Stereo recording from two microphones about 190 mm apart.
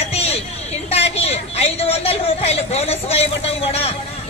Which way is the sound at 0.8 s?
30° left (ahead or behind).